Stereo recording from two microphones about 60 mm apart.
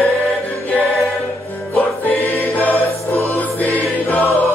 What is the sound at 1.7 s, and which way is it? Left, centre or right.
Music, left.